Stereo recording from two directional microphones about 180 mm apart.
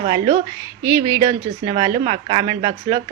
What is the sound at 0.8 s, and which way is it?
Speech, 20° right (ahead or behind).